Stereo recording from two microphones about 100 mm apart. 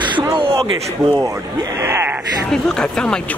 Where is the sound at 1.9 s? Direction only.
25° right (ahead or behind).